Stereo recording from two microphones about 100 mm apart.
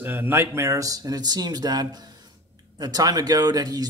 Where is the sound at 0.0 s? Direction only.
20° right (ahead or behind).